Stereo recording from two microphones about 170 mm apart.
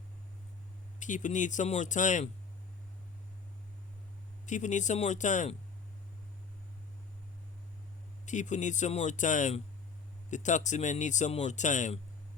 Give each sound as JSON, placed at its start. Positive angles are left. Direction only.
{"t": 0.9, "sound": "speech", "side_deg": 45}
{"t": 4.4, "sound": "speech", "side_deg": 45}
{"t": 8.2, "sound": "speech", "side_deg": 45}